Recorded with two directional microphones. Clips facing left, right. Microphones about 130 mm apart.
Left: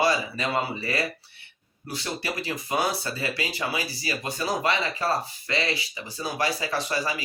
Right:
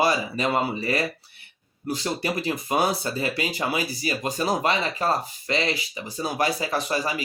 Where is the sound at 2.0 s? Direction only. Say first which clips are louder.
Right 4 dB; 35° right (ahead or behind).